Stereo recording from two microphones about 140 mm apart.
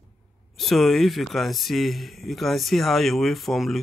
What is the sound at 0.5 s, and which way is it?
Speech, centre (ahead or behind).